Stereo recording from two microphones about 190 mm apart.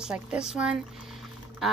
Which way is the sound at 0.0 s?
5° right (ahead or behind).